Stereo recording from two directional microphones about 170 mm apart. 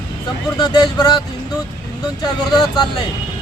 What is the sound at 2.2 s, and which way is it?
Speech, 25° left (ahead or behind).